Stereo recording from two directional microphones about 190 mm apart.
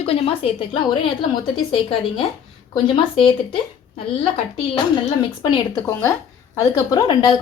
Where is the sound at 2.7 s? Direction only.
25° left (ahead or behind).